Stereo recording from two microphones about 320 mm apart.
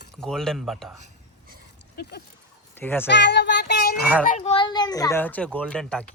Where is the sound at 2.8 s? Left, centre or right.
Centre.